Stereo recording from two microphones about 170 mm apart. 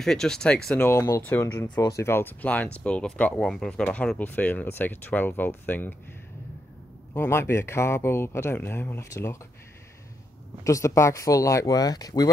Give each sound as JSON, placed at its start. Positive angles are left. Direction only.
{"t": 0.0, "sound": "speech", "side_deg": 5}
{"t": 7.2, "sound": "speech", "side_deg": 15}
{"t": 10.6, "sound": "speech", "side_deg": 20}